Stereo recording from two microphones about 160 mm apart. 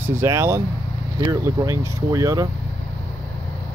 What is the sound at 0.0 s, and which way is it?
Speech, 15° right (ahead or behind).